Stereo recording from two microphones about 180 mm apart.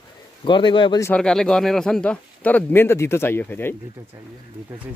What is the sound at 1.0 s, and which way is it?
Speech, 5° left (ahead or behind).